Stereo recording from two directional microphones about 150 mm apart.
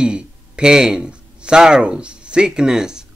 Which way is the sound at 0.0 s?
5° right (ahead or behind).